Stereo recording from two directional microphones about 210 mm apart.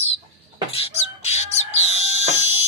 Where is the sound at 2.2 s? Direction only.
30° right (ahead or behind).